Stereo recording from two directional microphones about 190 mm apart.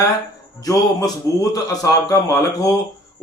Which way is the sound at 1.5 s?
20° left (ahead or behind).